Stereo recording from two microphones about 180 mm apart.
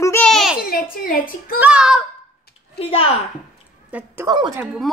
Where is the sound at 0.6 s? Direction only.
55° left (ahead or behind).